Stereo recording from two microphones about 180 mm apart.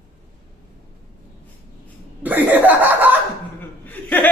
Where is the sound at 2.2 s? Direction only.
10° right (ahead or behind).